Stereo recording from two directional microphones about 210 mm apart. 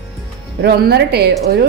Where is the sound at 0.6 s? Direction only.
50° right (ahead or behind).